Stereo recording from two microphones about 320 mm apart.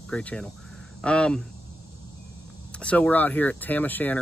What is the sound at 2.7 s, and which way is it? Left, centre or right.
Speech, centre.